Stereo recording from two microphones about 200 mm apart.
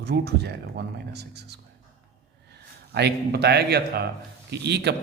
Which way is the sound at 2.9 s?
55° right (ahead or behind).